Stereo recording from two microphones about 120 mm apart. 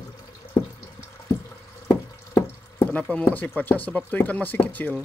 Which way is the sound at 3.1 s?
15° left (ahead or behind).